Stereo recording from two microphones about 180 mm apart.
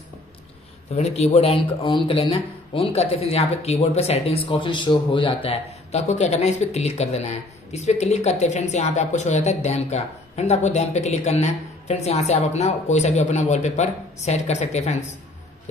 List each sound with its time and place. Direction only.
0.9 s speech: 35° left (ahead or behind)